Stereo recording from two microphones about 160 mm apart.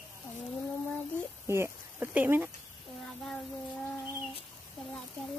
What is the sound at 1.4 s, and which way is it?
Speech, 15° right (ahead or behind).